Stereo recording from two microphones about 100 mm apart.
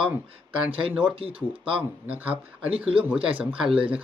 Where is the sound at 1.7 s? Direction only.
15° right (ahead or behind).